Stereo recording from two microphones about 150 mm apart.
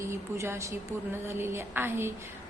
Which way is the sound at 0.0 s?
20° right (ahead or behind).